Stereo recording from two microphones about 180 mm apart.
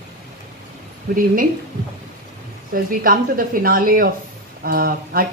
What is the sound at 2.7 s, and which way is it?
Speech, 50° right (ahead or behind).